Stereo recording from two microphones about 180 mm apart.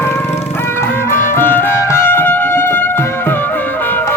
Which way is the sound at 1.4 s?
10° left (ahead or behind).